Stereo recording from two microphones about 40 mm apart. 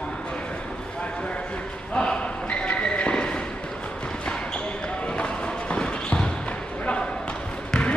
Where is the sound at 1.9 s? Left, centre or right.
Left.